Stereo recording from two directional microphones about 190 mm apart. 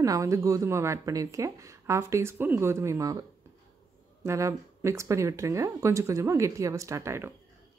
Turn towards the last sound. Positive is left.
turn(degrees=-15)  # may be behind; listen again after turning